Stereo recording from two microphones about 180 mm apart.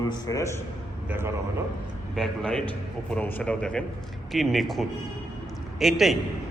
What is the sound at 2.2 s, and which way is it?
A man's voice, 5° left (ahead or behind).